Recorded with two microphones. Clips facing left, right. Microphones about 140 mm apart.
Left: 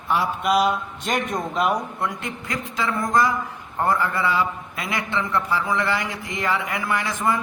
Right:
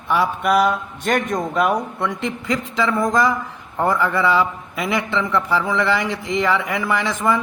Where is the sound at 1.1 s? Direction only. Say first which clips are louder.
Right 5 dB; 55° right (ahead or behind).